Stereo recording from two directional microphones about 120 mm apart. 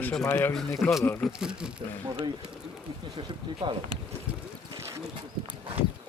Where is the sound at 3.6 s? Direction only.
40° right (ahead or behind).